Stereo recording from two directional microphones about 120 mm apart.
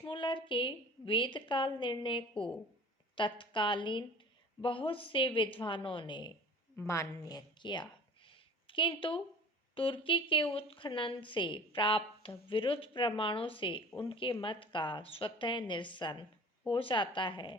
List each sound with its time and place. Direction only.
0.1 s a woman's voice: 45° left (ahead or behind)
6.7 s a woman's voice: 25° left (ahead or behind); by 17.6 s 40° left (ahead or behind)